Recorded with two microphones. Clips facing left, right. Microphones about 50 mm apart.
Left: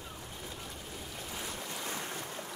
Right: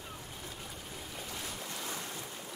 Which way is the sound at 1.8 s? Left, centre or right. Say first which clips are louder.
Left 2 dB; left.